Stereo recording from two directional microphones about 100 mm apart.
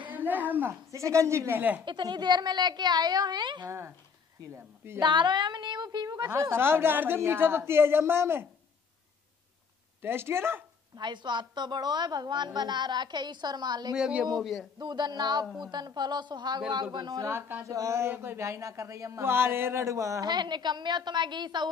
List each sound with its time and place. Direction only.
0.1 s a woman's voice: 15° right (ahead or behind)
1.9 s a woman's voice: 50° right (ahead or behind)
3.6 s speech: 25° right (ahead or behind)
5.0 s a woman's voice: 50° right (ahead or behind)
6.2 s speech: 25° right (ahead or behind)
10.0 s speech: 25° right (ahead or behind)
11.0 s a woman's voice: 50° right (ahead or behind)
13.9 s a man's voice: 5° right (ahead or behind)
14.8 s a woman's voice: 45° right (ahead or behind)
17.3 s speech: 25° right (ahead or behind)
20.2 s a woman's voice: 45° right (ahead or behind)